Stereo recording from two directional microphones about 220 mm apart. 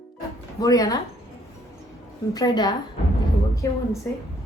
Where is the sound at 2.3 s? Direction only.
15° left (ahead or behind).